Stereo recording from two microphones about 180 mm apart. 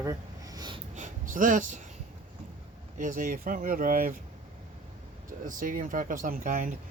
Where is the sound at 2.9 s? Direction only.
45° right (ahead or behind).